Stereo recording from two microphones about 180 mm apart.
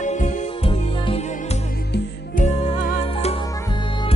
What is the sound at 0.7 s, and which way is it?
Music, 30° left (ahead or behind).